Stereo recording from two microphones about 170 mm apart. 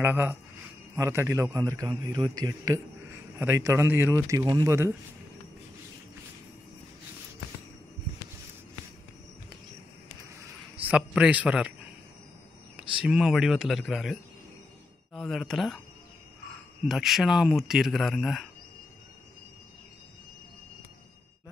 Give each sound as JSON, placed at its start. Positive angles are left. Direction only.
{"t": 0.0, "sound": "a man's voice", "side_deg": -10}
{"t": 10.8, "sound": "speech", "side_deg": -10}
{"t": 12.7, "sound": "speech", "side_deg": -5}
{"t": 15.1, "sound": "speech", "side_deg": 0}
{"t": 16.8, "sound": "speech", "side_deg": 0}